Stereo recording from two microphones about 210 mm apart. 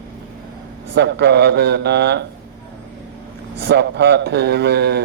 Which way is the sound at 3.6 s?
55° right (ahead or behind).